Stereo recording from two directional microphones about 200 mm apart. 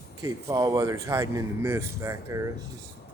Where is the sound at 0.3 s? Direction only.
15° right (ahead or behind).